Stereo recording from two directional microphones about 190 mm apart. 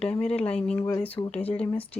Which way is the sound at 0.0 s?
30° left (ahead or behind).